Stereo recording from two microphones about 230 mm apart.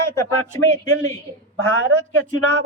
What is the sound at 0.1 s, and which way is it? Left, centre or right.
Speech, centre.